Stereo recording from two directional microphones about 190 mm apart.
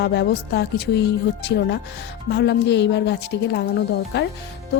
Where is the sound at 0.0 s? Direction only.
60° left (ahead or behind).